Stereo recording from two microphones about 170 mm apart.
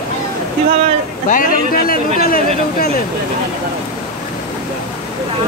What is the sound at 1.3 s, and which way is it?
Speech, 55° left (ahead or behind).